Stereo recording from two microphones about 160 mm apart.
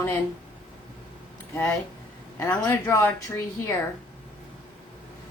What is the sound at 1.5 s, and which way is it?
A woman's voice, 15° left (ahead or behind).